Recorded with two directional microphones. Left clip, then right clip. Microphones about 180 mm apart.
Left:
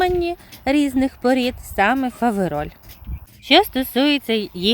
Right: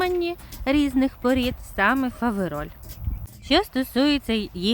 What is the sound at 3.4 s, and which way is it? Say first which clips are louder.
Speech: left 7 dB; 10° left (ahead or behind).